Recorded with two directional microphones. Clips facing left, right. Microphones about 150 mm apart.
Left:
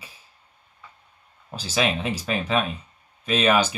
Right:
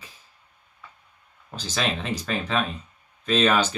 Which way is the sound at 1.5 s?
10° left (ahead or behind).